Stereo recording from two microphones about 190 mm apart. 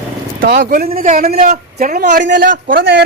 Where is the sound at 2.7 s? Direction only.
55° right (ahead or behind).